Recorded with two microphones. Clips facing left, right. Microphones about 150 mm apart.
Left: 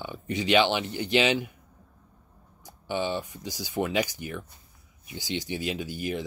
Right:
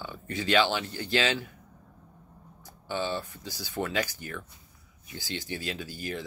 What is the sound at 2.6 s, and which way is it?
Speech, 15° left (ahead or behind).